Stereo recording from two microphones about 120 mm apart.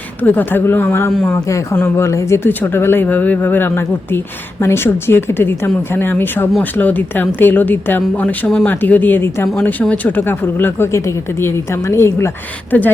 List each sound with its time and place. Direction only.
0.2 s speech: 15° left (ahead or behind)